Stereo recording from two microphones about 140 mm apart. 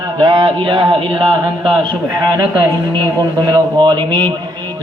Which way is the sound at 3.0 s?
30° right (ahead or behind).